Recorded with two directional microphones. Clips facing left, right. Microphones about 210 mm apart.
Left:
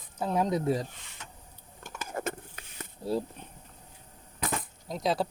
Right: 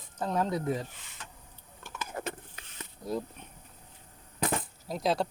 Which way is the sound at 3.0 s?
30° left (ahead or behind).